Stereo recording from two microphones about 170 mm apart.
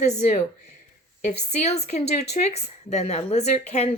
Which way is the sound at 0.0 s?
40° left (ahead or behind).